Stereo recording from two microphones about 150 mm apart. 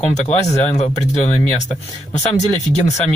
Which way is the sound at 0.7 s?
50° left (ahead or behind).